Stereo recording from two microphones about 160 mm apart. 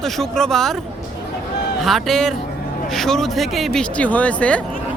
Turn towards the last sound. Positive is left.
turn(degrees=10)  # may be behind; listen again after turning